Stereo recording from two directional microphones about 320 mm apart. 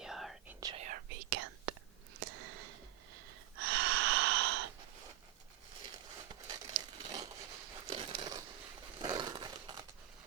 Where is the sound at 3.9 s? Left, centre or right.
Right.